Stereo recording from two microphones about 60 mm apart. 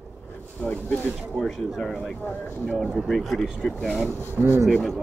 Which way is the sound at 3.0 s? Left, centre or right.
Centre.